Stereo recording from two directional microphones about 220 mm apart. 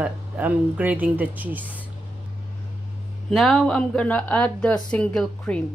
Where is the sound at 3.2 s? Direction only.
Centre (ahead or behind).